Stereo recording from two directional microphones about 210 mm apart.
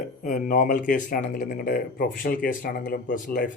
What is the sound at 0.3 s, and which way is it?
Speech, 40° left (ahead or behind).